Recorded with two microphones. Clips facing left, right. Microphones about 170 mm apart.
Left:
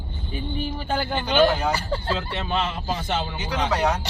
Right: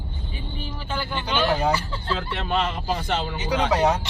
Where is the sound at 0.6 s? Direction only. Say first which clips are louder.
Left 2 dB; 50° left (ahead or behind).